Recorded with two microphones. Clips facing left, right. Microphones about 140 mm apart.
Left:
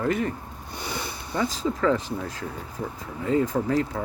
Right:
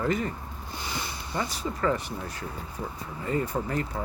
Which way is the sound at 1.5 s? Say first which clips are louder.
Left 4 dB; 90° left.